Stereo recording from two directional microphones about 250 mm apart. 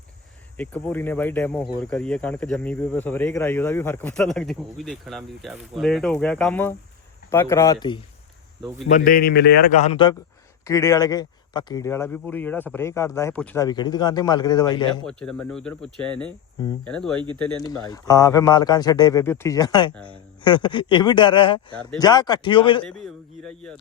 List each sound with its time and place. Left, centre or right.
0.5 s speech: centre
9.0 s a man's voice: left; by 15.0 s centre
15.0 s speech: centre
17.6 s speech: centre
22.8 s a man's voice: centre